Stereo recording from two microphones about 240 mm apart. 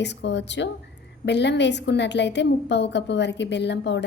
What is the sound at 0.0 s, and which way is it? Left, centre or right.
A woman's voice, left.